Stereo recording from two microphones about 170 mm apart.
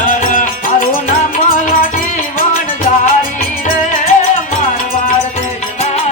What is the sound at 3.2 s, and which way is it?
Music, 55° left (ahead or behind).